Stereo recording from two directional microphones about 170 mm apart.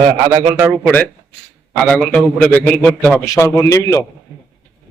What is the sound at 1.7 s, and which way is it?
A man's voice, 5° left (ahead or behind).